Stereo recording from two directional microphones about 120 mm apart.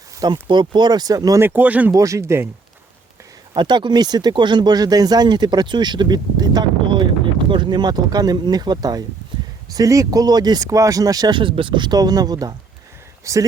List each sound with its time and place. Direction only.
0.4 s speech: 40° right (ahead or behind)
1.4 s speech: 15° right (ahead or behind)
1.9 s speech: 25° right (ahead or behind)
3.5 s speech: 40° right (ahead or behind)